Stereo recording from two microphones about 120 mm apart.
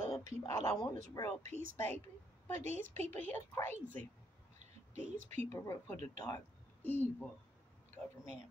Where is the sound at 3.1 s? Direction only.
15° left (ahead or behind).